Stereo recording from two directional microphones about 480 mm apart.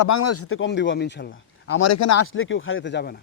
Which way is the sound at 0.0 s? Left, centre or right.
Left.